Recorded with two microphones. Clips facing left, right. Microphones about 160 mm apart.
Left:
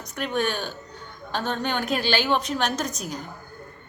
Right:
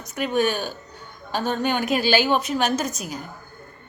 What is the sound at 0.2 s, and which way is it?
A woman's voice, 10° right (ahead or behind).